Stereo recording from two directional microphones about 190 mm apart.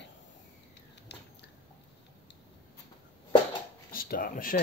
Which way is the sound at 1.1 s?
60° left (ahead or behind).